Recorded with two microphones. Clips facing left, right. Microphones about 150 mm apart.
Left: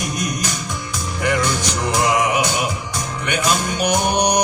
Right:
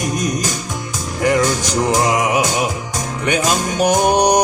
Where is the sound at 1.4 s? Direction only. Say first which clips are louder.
Right 4 dB; 45° right (ahead or behind).